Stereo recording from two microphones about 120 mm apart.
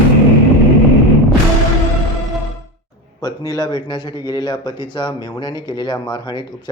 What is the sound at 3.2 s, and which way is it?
A man's voice, 30° left (ahead or behind).